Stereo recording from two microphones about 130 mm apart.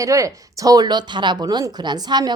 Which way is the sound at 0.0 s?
25° right (ahead or behind).